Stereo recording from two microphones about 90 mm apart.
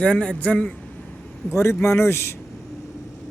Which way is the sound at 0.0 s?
10° left (ahead or behind).